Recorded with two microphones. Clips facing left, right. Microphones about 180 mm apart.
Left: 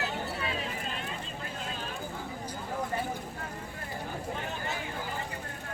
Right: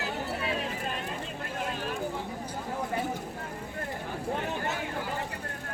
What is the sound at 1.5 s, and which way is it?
Vehicle, 60° right (ahead or behind).